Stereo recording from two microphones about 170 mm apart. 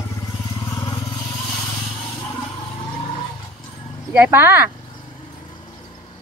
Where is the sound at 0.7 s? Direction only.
20° left (ahead or behind).